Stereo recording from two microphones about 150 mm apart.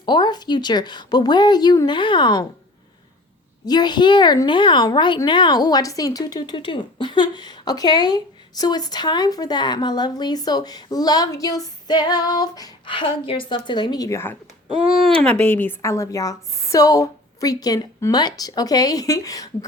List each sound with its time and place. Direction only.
0.0 s a woman's voice: 30° left (ahead or behind)
3.7 s a woman's voice: 30° left (ahead or behind)